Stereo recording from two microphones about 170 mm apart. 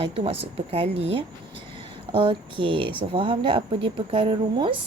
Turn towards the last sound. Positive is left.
turn(degrees=-30)  # may be behind; listen again after turning